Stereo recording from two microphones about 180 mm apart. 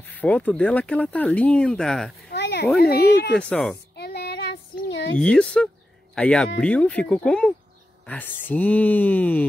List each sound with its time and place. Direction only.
0.0 s speech: 10° left (ahead or behind)
2.2 s a sound: 70° left (ahead or behind)
2.8 s speech: 60° left (ahead or behind)
3.3 s speech: 5° left (ahead or behind)
3.9 s child singing: 65° left (ahead or behind)
5.2 s speech: 5° left (ahead or behind)